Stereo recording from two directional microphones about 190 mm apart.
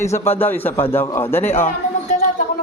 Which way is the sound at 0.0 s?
15° left (ahead or behind).